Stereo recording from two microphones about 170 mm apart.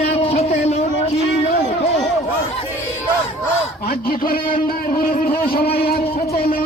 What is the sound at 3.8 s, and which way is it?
Speech, 60° left (ahead or behind).